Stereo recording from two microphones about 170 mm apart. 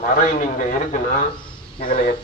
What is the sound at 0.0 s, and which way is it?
Speech, 50° left (ahead or behind).